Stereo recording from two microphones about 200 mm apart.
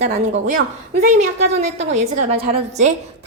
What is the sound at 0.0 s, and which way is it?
Speech, 35° right (ahead or behind).